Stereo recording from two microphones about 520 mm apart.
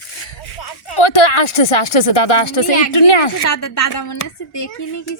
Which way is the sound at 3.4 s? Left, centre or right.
Left.